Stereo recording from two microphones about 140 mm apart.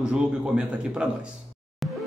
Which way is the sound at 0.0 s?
5° right (ahead or behind).